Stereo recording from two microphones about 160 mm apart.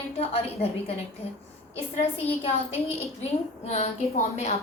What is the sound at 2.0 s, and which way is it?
A woman's voice, 40° left (ahead or behind).